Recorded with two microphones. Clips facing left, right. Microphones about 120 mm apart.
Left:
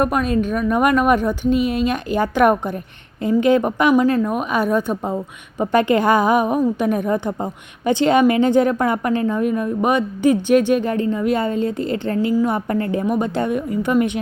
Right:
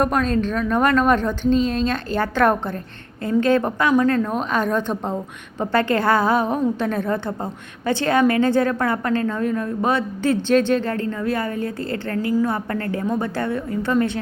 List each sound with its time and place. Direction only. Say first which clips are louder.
0.0 s a woman's voice: left 1 dB; 5° left (ahead or behind)